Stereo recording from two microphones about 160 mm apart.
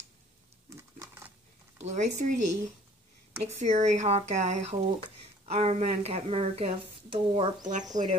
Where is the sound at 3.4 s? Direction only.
45° right (ahead or behind).